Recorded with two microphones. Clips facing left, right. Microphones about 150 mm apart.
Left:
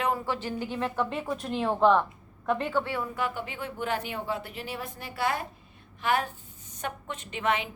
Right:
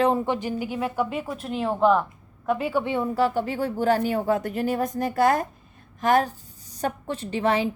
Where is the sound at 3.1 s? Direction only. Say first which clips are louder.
Right 9 dB; 35° right (ahead or behind).